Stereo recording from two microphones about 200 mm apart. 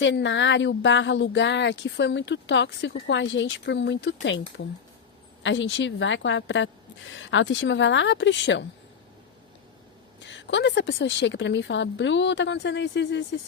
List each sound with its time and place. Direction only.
0.0 s speech: 65° left (ahead or behind)
10.2 s speech: 65° left (ahead or behind)